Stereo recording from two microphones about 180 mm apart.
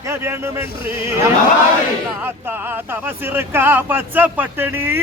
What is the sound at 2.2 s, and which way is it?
Speech, 10° right (ahead or behind).